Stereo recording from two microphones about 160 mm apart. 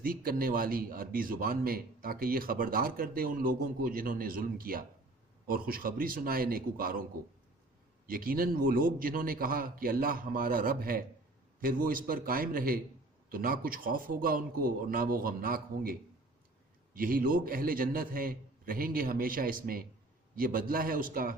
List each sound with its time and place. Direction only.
0.0 s speech: 65° right (ahead or behind)
8.0 s speech: 65° right (ahead or behind)